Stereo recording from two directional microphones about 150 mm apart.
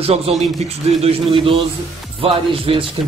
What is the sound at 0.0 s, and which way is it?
Speech, 45° right (ahead or behind).